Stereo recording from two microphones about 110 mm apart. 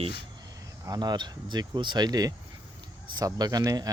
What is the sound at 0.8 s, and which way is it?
Speech, 35° right (ahead or behind).